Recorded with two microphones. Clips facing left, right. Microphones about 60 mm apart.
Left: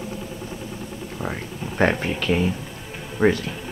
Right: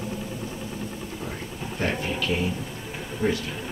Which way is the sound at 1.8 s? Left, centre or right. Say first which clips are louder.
Left 7 dB; left.